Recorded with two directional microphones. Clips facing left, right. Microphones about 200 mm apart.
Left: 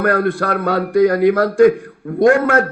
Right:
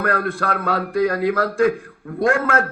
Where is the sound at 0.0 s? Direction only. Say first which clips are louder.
Left 6 dB; 30° left (ahead or behind).